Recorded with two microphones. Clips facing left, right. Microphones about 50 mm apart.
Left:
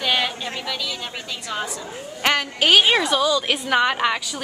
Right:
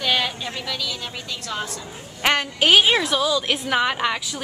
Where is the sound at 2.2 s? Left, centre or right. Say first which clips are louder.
Even; centre.